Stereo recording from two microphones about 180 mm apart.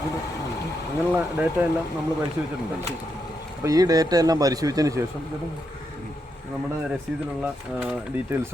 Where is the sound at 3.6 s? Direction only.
20° right (ahead or behind).